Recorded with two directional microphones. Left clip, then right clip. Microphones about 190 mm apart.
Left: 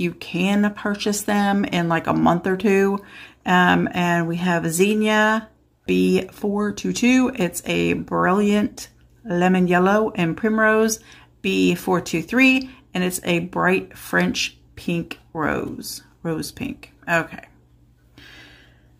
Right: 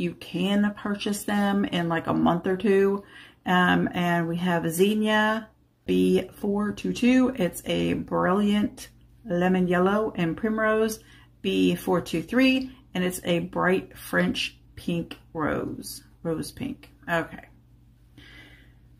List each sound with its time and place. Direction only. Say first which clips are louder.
0.0 s speech: left 6 dB; 25° left (ahead or behind)
18.1 s gasp: left 5 dB; 15° left (ahead or behind)